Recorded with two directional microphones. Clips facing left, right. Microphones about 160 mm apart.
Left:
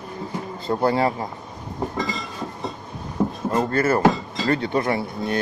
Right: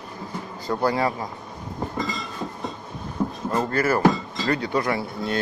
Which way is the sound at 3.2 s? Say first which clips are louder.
Left 3 dB; 25° left (ahead or behind).